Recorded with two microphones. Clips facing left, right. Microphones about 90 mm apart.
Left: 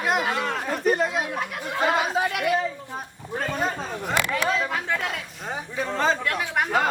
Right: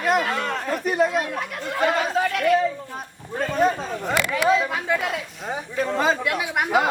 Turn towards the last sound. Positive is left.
turn(degrees=-10)  # may be behind; listen again after turning